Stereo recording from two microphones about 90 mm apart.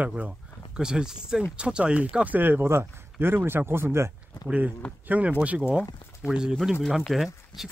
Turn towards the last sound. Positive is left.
turn(degrees=-5)  # may be behind; listen again after turning